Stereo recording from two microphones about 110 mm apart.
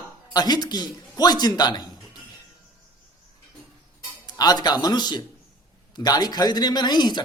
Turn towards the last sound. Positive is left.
turn(degrees=40)  # may be behind; listen again after turning